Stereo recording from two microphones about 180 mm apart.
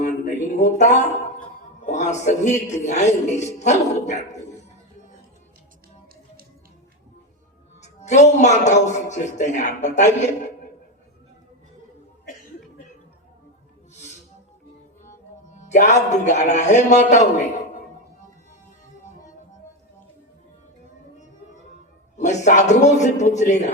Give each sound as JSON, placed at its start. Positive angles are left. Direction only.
{"t": 0.6, "sound": "speech", "side_deg": 40}
{"t": 7.8, "sound": "speech", "side_deg": 40}
{"t": 13.9, "sound": "music", "side_deg": 40}
{"t": 15.5, "sound": "a man's voice", "side_deg": 40}
{"t": 22.2, "sound": "speech", "side_deg": 40}